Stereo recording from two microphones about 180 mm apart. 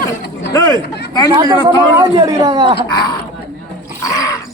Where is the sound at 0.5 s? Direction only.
20° left (ahead or behind).